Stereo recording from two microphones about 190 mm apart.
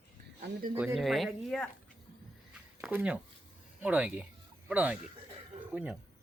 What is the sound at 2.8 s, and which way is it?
Speech, 5° right (ahead or behind).